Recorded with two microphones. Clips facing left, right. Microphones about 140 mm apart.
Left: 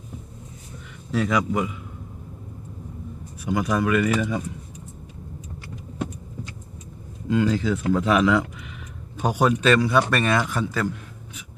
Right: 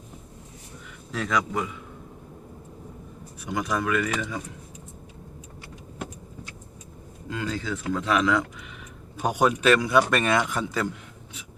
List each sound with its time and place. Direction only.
1.1 s speech: 5° left (ahead or behind)
3.5 s speech: 10° left (ahead or behind)
7.3 s speech: 15° left (ahead or behind)
9.1 s a man's voice: 10° right (ahead or behind)